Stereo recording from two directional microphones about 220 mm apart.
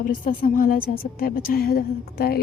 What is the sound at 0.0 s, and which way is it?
A woman's voice, 40° left (ahead or behind).